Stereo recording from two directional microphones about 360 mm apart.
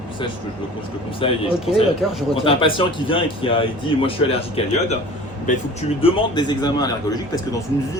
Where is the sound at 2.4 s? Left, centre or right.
Centre.